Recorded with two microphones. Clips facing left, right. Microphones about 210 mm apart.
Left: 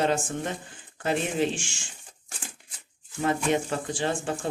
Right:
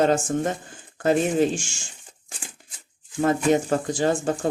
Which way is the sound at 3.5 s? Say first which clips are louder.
Right 6 dB; 40° right (ahead or behind).